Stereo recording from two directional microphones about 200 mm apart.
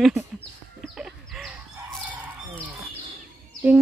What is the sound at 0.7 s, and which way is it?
Chicken, centre (ahead or behind).